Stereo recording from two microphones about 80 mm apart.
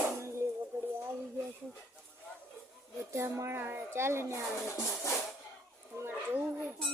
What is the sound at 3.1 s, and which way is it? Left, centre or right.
Speech, right.